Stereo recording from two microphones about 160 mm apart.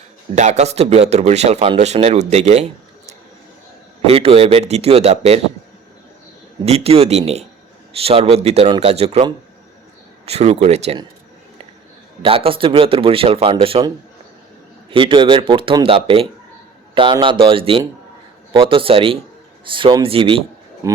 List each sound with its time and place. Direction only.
0.3 s speech: 45° right (ahead or behind)
4.0 s a man's voice: 40° right (ahead or behind)
6.7 s a man's voice: 40° right (ahead or behind)
10.2 s speech: 40° right (ahead or behind)
12.2 s a man's voice: 35° right (ahead or behind)
14.8 s a man's voice: 30° right (ahead or behind)
20.8 s speech: 20° right (ahead or behind)